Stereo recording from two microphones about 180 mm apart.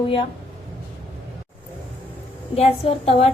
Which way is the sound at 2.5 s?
35° left (ahead or behind).